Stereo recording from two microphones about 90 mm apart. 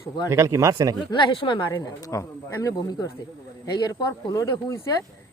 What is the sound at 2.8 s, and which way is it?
Speech, 45° left (ahead or behind).